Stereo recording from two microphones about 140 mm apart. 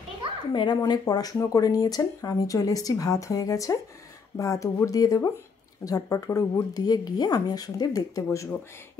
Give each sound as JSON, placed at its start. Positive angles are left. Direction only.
{"t": 0.5, "sound": "speech", "side_deg": 30}